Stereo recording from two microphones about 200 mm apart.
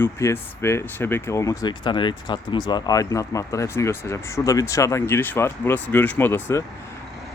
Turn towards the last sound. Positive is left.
turn(degrees=10)  # may be behind; listen again after turning